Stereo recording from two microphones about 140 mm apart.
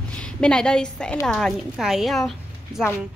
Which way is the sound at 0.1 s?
5° left (ahead or behind).